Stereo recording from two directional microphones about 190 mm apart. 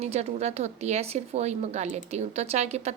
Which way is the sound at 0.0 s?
35° right (ahead or behind).